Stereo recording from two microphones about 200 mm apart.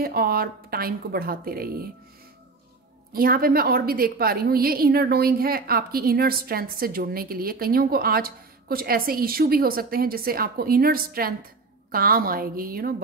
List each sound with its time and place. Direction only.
0.0 s a woman's voice: 50° right (ahead or behind)
3.1 s a woman's voice: 45° right (ahead or behind)